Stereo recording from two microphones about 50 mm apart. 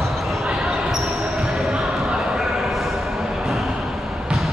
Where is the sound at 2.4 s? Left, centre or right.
Centre.